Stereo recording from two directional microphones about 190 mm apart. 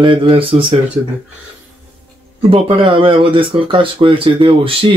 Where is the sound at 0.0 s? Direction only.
25° right (ahead or behind).